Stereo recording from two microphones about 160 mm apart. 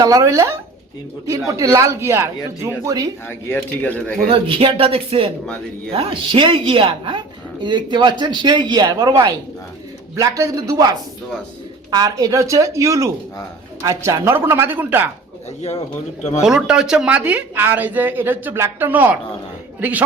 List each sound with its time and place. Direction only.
0.0 s speech: 20° right (ahead or behind)
3.2 s speech: 10° left (ahead or behind)
4.3 s speech: 35° right (ahead or behind); by 15.1 s 10° right (ahead or behind)
16.4 s speech: 5° right (ahead or behind)